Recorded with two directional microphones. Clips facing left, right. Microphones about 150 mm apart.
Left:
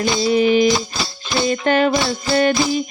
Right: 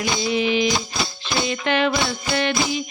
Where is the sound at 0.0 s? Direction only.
40° left (ahead or behind).